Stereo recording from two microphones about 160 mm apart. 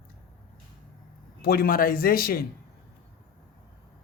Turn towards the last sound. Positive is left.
turn(degrees=70)  # may be behind; listen again after turning